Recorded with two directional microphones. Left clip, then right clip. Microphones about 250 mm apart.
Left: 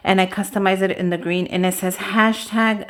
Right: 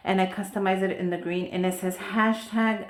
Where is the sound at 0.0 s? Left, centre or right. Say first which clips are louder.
Left 8 dB; left.